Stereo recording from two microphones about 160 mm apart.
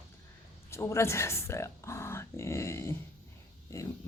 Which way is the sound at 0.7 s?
15° left (ahead or behind).